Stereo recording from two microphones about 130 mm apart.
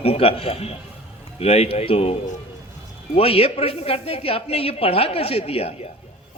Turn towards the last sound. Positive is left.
turn(degrees=50)  # may be behind; listen again after turning